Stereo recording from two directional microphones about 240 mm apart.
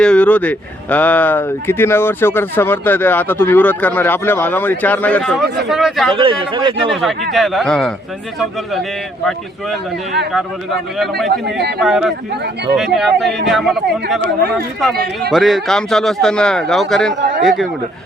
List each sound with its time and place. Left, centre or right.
0.0 s speech: centre
6.1 s speech: right
7.0 s speech: centre
9.2 s speech: centre
11.3 s speech: right
11.8 s speech: centre
14.9 s a man's voice: right
15.3 s speech: centre